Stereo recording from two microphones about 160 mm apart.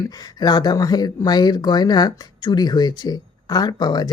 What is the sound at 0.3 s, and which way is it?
Speech, 25° left (ahead or behind).